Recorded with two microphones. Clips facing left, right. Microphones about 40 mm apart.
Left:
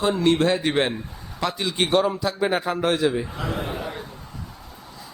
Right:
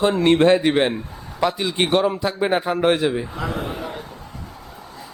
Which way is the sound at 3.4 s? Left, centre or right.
Right.